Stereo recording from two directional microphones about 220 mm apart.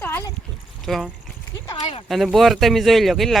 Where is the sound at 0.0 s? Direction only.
10° left (ahead or behind).